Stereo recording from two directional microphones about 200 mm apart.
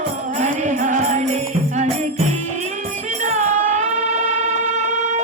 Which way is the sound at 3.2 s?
35° right (ahead or behind).